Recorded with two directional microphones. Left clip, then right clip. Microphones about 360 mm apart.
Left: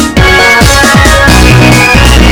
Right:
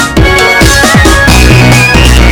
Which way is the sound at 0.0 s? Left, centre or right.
Centre.